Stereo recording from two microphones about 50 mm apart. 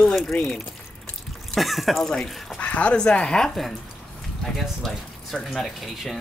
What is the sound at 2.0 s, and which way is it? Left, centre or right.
Speech, centre.